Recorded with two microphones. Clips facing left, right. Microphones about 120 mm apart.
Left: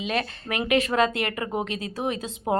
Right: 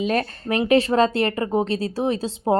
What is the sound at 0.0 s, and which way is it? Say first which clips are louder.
Speech: right 5 dB; 45° right (ahead or behind).